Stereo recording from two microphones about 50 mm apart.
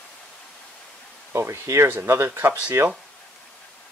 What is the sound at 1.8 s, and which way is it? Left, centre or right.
Speech, right.